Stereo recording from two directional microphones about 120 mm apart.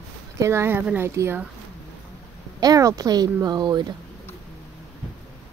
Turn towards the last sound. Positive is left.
turn(degrees=-40)  # may be behind; listen again after turning